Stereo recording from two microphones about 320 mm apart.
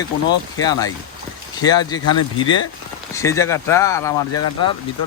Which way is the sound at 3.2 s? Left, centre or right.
Centre.